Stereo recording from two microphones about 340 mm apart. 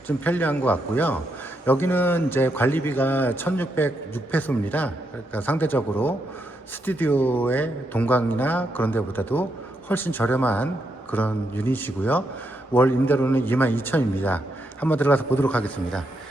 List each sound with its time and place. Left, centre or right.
0.3 s a man's voice: centre